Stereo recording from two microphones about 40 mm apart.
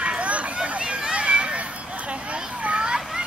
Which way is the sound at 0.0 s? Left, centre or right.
Right.